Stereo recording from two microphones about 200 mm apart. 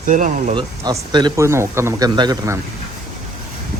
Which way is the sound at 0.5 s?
20° right (ahead or behind).